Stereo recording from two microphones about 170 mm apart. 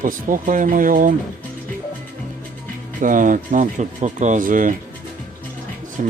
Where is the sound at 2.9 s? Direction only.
50° right (ahead or behind).